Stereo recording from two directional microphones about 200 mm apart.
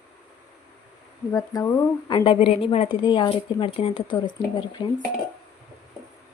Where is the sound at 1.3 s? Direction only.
15° left (ahead or behind).